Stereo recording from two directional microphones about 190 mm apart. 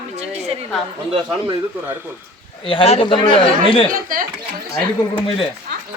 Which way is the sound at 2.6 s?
30° left (ahead or behind).